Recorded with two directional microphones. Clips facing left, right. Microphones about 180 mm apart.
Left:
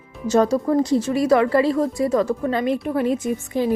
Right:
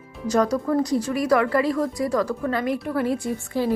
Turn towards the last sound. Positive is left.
turn(degrees=20)  # may be behind; listen again after turning